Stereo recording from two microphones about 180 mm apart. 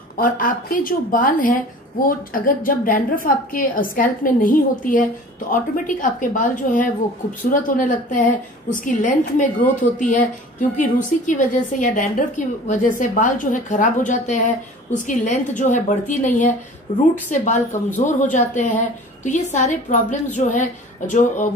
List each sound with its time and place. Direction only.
0.2 s a woman's voice: 50° left (ahead or behind)
10.8 s a woman's voice: 45° left (ahead or behind)